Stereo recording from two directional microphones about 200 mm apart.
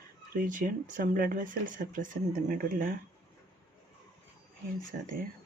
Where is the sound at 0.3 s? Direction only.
45° right (ahead or behind).